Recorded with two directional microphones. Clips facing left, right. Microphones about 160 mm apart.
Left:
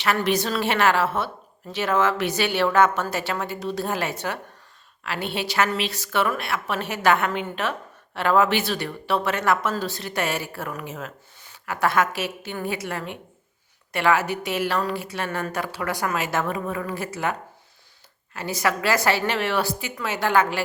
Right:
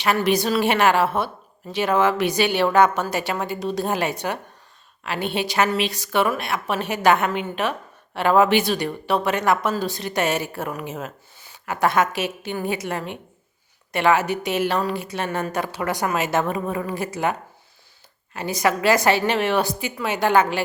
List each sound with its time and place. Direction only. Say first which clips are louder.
0.0 s a woman's voice: right 3 dB; 15° right (ahead or behind)
18.3 s a woman's voice: right 3 dB; 20° right (ahead or behind)